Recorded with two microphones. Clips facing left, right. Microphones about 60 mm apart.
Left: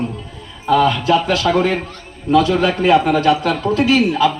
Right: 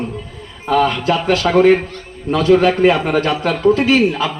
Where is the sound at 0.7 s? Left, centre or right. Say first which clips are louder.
Left 1 dB; right.